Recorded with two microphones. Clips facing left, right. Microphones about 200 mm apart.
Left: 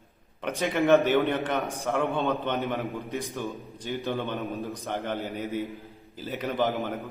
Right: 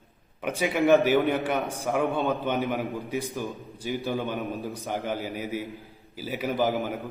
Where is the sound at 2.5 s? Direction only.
Centre (ahead or behind).